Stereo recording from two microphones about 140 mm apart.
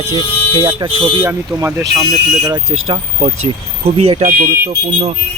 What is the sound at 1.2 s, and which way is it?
Speech, 20° right (ahead or behind).